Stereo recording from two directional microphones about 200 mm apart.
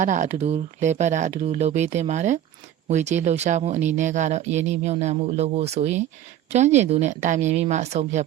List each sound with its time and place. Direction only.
0.0 s speech: 40° right (ahead or behind)